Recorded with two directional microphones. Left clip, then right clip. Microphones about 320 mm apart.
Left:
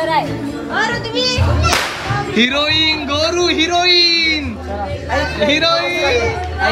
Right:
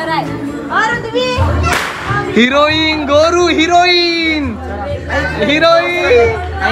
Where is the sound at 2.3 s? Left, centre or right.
Centre.